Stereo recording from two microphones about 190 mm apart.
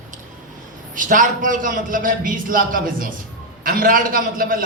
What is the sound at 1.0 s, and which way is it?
A man's voice, 45° right (ahead or behind).